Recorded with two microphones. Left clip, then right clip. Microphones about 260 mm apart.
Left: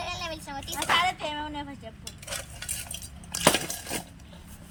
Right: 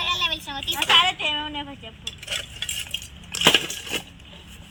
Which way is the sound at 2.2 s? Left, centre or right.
Centre.